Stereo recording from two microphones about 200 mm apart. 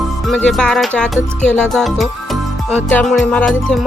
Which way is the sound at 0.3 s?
5° left (ahead or behind).